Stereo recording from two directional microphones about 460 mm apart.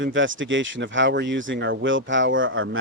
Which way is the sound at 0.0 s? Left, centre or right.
Right.